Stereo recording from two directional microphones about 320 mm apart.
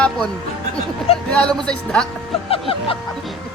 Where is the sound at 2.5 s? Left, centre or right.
Centre.